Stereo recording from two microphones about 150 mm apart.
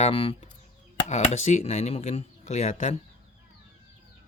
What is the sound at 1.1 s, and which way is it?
Speech, 50° left (ahead or behind).